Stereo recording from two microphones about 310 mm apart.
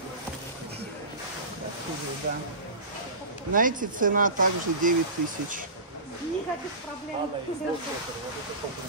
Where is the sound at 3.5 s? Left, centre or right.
Right.